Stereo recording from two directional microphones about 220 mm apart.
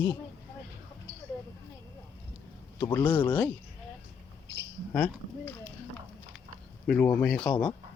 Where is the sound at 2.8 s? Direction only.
10° left (ahead or behind).